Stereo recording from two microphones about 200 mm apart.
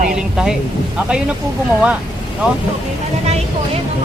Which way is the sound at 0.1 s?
5° right (ahead or behind).